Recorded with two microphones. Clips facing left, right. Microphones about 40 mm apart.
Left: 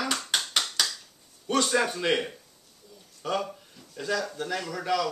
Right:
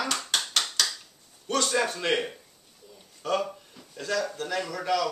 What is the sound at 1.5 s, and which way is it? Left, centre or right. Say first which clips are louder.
A man's voice: left 1 dB; centre.